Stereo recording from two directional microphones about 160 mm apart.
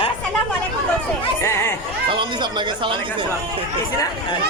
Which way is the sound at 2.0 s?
30° right (ahead or behind).